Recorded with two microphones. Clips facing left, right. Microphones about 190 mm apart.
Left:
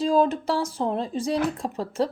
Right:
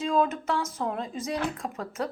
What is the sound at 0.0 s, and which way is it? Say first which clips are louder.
A woman's voice: left 5 dB; 35° left (ahead or behind).